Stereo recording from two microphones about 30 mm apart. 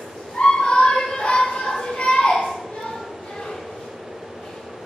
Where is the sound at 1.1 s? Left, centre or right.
Left.